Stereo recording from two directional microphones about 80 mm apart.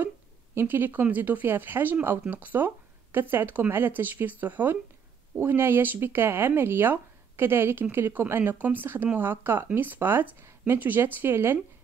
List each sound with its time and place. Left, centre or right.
0.6 s speech: right